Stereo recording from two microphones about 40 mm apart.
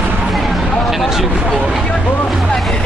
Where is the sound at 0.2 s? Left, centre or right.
Centre.